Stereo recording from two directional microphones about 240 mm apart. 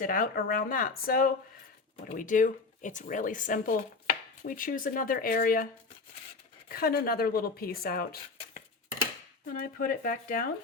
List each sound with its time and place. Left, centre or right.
0.0 s speech: left
6.7 s speech: left
9.5 s speech: left